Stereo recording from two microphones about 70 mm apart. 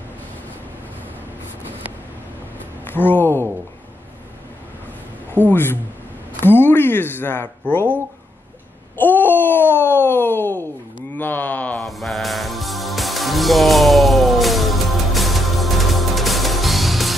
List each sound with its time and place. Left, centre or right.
2.9 s speech: left
5.5 s speech: left
8.9 s a sound: left
11.8 s music: centre